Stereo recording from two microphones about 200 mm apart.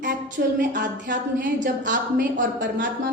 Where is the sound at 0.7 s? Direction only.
60° right (ahead or behind).